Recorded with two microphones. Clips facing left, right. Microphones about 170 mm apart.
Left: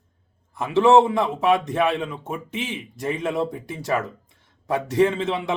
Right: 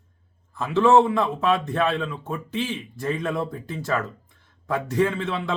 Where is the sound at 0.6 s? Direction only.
15° left (ahead or behind).